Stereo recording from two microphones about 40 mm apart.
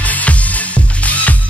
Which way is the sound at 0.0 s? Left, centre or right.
Left.